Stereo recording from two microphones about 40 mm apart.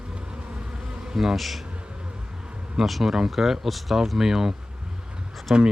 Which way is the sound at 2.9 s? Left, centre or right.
Centre.